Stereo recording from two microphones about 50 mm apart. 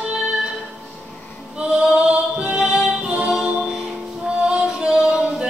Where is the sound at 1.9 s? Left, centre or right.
Centre.